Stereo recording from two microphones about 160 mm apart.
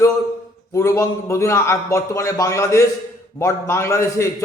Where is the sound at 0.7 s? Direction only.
20° left (ahead or behind).